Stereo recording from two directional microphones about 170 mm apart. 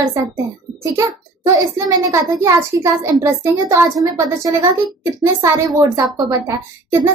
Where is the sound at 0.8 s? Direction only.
20° right (ahead or behind).